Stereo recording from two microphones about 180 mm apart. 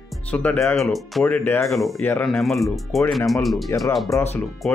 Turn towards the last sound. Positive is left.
turn(degrees=0)  # may be behind; listen again after turning